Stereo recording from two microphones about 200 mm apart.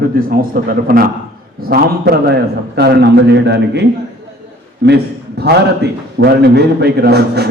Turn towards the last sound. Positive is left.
turn(degrees=-55)  # may be behind; listen again after turning